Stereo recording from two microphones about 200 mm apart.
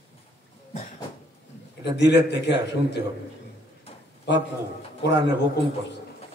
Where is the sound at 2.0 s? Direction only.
60° left (ahead or behind).